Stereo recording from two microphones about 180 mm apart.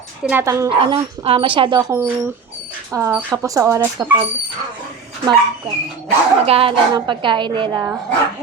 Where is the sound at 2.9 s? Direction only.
15° right (ahead or behind).